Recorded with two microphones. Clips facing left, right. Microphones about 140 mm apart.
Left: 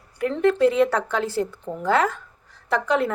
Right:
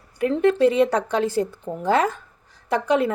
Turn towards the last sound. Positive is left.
turn(degrees=-15)  # may be behind; listen again after turning